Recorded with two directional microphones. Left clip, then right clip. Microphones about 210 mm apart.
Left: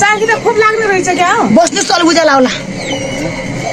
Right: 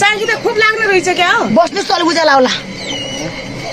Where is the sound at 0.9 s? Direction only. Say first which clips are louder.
Left 1 dB; 50° right (ahead or behind).